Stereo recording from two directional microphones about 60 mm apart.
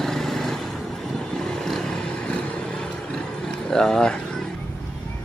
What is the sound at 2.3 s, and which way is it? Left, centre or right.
Vehicle, left.